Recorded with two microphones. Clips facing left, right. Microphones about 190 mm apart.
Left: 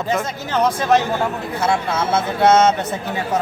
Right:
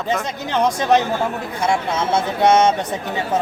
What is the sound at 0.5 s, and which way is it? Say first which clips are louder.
Speech: even; 15° right (ahead or behind).